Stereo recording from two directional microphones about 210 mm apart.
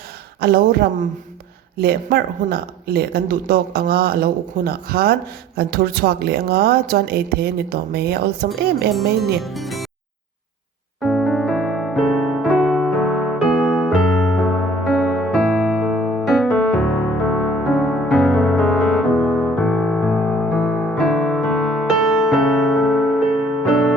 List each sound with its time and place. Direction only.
0.3 s speech: 45° right (ahead or behind)
9.0 s speech: centre (ahead or behind)
11.0 s electric piano: centre (ahead or behind)